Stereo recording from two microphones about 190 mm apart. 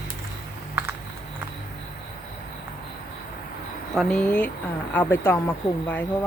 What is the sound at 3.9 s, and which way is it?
Speech, centre (ahead or behind).